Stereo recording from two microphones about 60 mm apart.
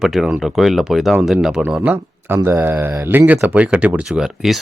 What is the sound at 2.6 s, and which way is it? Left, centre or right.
Mantra, right.